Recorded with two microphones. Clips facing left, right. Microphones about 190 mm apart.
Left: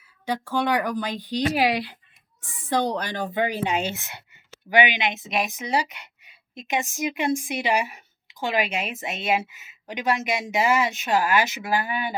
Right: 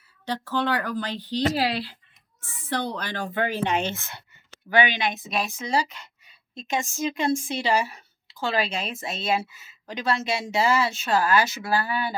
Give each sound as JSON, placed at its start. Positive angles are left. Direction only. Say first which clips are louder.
{"t": 0.3, "sound": "speech", "louder": "left 2 dB", "side_deg": 10}